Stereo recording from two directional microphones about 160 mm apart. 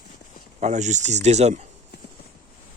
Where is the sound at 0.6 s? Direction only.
45° right (ahead or behind).